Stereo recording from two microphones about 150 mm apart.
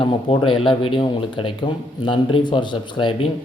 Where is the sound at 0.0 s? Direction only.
35° left (ahead or behind).